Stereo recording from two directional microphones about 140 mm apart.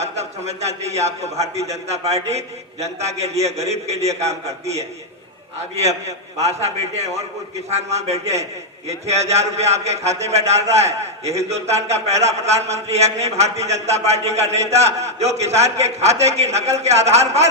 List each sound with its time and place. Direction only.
0.0 s a man's voice: 50° right (ahead or behind)
5.7 s a man's voice: 50° right (ahead or behind)